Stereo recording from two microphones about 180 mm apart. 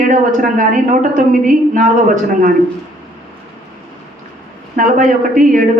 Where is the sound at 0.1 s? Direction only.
45° right (ahead or behind).